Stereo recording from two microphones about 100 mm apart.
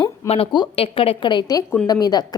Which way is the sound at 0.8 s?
70° left (ahead or behind).